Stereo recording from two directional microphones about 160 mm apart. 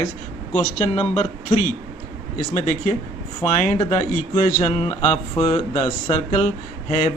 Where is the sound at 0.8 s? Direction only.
40° left (ahead or behind).